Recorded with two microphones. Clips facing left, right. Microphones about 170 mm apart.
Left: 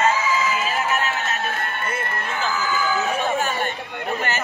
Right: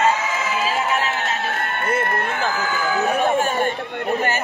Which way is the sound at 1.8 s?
60° right (ahead or behind).